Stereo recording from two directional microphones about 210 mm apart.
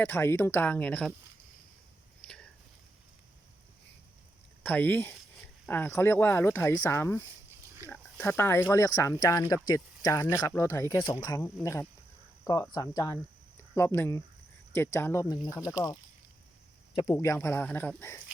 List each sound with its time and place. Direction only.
0.0 s speech: 10° left (ahead or behind)
2.2 s a sound: 5° left (ahead or behind)
4.6 s speech: 10° left (ahead or behind)
16.9 s speech: 20° left (ahead or behind)